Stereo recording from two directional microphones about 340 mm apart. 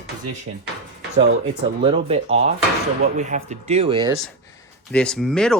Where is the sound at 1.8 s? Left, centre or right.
Centre.